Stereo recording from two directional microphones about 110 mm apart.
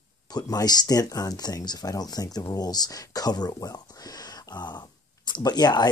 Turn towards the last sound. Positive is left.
turn(degrees=40)  # may be behind; listen again after turning